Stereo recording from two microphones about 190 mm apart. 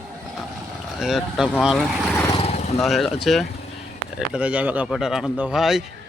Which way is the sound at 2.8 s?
Centre (ahead or behind).